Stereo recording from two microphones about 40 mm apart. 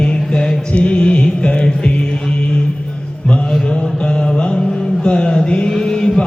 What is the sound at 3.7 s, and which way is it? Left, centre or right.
Music, left.